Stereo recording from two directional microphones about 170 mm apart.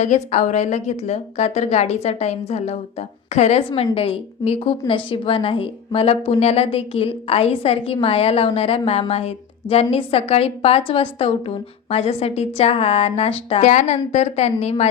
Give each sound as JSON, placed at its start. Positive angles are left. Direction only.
{"t": 0.0, "sound": "a woman's voice", "side_deg": 40}